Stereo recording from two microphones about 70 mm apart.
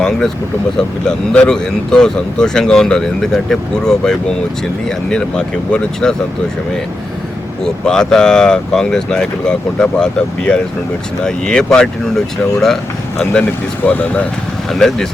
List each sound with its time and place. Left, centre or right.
0.8 s speech: centre
7.6 s speech: centre
13.8 s speech: left
14.7 s speech: centre